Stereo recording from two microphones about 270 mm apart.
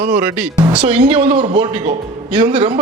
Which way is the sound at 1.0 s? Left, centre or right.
Right.